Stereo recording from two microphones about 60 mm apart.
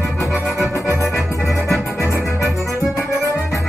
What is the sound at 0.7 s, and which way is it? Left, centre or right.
Music, left.